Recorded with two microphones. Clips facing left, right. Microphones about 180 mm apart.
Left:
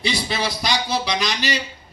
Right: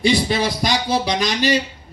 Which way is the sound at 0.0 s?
50° right (ahead or behind).